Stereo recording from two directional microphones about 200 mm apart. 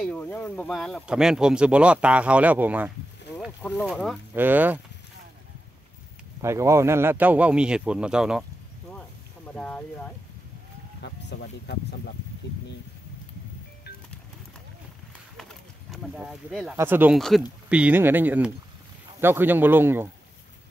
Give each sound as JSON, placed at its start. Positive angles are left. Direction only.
{"t": 0.0, "sound": "speech", "side_deg": 5}
{"t": 6.4, "sound": "speech", "side_deg": -15}
{"t": 9.6, "sound": "speech", "side_deg": 5}
{"t": 11.0, "sound": "speech", "side_deg": 60}
{"t": 15.9, "sound": "speech", "side_deg": 0}